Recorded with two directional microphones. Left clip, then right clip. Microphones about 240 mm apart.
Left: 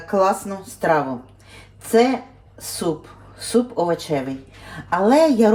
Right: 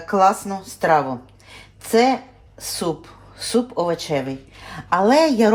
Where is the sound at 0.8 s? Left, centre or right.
Right.